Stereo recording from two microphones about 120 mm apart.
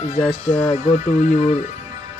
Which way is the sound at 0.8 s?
75° left (ahead or behind).